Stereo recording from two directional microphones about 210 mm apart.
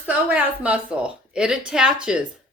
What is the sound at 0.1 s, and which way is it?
A woman's voice, 5° right (ahead or behind).